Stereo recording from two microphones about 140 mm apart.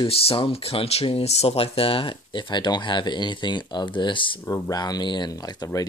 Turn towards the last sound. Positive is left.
turn(degrees=30)  # may be behind; listen again after turning